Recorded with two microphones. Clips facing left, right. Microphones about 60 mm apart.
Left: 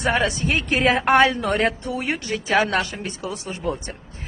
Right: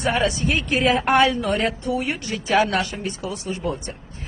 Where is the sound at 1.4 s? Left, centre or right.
Left.